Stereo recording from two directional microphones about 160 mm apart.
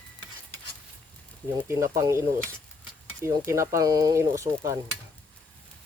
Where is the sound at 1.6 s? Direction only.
15° right (ahead or behind).